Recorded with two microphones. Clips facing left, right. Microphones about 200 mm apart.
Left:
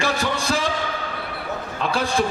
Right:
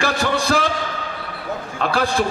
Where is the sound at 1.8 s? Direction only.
60° right (ahead or behind).